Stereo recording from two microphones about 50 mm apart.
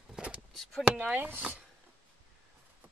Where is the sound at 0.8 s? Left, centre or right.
Right.